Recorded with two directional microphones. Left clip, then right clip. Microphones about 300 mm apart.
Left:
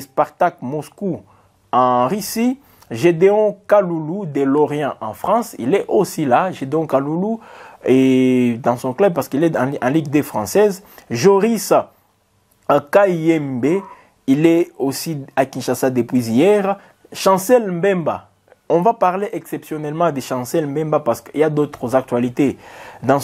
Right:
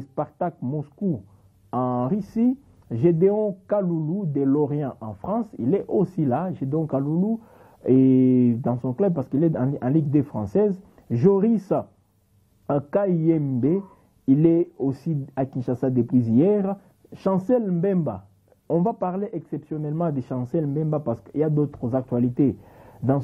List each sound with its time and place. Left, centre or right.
0.0 s speech: centre
7.4 s speech: centre